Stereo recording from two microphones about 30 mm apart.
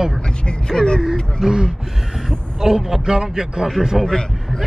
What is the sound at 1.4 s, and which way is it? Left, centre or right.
Speech, right.